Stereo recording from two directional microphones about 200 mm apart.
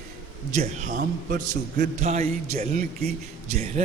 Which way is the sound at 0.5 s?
40° right (ahead or behind).